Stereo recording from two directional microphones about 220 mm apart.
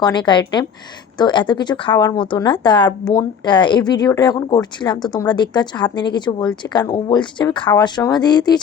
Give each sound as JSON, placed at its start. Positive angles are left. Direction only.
{"t": 0.0, "sound": "speech", "side_deg": 20}